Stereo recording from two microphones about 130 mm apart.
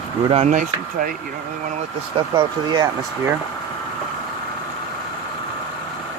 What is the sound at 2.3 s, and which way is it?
Speech, 30° right (ahead or behind).